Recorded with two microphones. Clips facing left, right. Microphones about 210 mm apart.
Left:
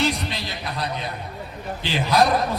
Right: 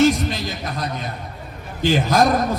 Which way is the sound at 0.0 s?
45° right (ahead or behind).